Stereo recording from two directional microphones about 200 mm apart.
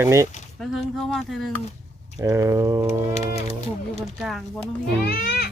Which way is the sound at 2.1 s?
15° right (ahead or behind).